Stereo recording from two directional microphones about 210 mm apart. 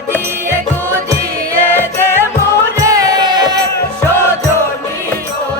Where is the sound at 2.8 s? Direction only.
15° right (ahead or behind).